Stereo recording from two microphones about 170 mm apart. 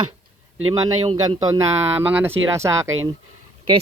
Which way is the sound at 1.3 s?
20° right (ahead or behind).